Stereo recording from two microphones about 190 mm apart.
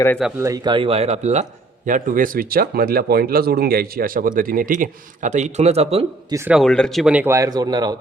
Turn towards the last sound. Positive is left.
turn(degrees=-20)  # may be behind; listen again after turning